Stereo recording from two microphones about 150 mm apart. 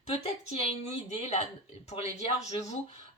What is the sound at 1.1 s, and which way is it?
Speech, 45° left (ahead or behind).